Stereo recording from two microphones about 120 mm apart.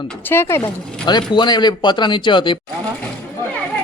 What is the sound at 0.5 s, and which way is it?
Speech, 20° left (ahead or behind).